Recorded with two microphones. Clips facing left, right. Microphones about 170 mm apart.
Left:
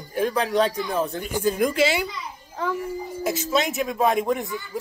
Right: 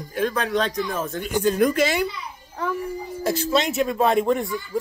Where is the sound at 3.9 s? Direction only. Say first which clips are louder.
Right 2 dB; 15° left (ahead or behind).